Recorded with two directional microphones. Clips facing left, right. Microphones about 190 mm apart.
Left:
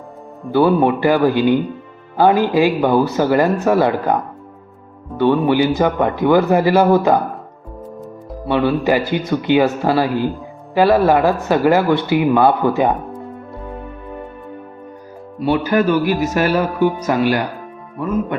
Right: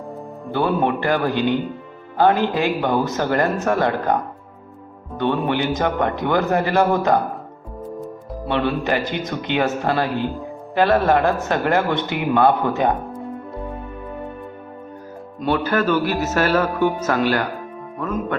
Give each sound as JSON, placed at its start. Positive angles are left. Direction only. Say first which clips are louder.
{"t": 0.4, "sound": "a man's voice", "louder": "left 6 dB", "side_deg": 10}
{"t": 5.1, "sound": "a man's voice", "louder": "left 6 dB", "side_deg": 10}
{"t": 8.4, "sound": "a man's voice", "louder": "left 5 dB", "side_deg": 5}
{"t": 15.4, "sound": "a man's voice", "louder": "left 4 dB", "side_deg": 10}